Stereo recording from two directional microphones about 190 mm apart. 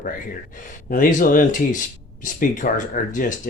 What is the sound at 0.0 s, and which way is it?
Speech, 45° left (ahead or behind).